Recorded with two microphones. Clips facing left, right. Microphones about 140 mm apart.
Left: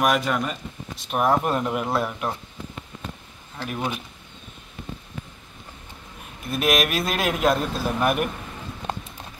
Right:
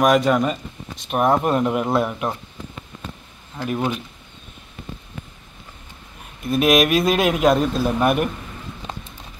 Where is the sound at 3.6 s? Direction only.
20° right (ahead or behind).